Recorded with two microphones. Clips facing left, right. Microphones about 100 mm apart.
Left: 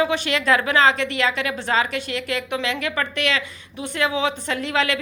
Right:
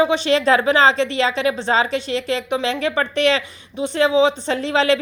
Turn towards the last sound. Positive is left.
turn(degrees=-30)  # may be behind; listen again after turning